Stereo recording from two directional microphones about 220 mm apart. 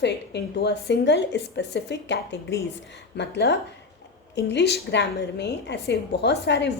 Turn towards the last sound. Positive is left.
turn(degrees=50)  # may be behind; listen again after turning